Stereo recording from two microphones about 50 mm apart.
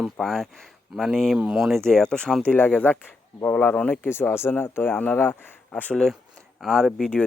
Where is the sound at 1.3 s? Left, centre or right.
Centre.